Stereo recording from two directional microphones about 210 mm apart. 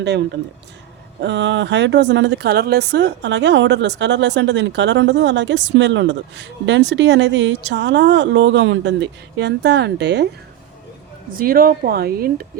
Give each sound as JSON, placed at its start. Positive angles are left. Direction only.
{"t": 1.2, "sound": "speech", "side_deg": -60}
{"t": 11.3, "sound": "speech", "side_deg": -45}